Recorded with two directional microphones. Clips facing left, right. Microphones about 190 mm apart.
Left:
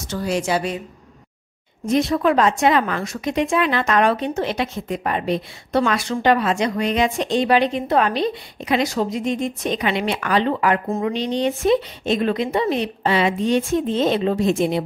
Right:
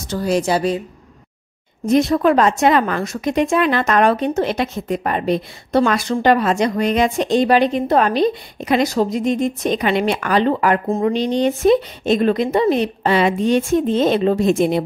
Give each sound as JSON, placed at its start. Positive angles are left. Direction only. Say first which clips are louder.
{"t": 0.1, "sound": "speech", "louder": "right 4 dB", "side_deg": -35}
{"t": 1.9, "sound": "speech", "louder": "right 4 dB", "side_deg": -45}